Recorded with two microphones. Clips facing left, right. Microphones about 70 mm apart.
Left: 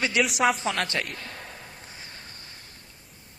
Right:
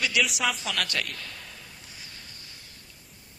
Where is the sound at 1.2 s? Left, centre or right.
Left.